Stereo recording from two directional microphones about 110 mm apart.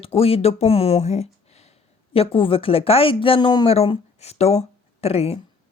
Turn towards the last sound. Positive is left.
turn(degrees=70)  # may be behind; listen again after turning